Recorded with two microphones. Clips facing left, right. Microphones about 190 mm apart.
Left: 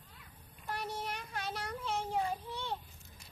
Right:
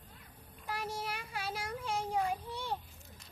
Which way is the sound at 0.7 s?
10° right (ahead or behind).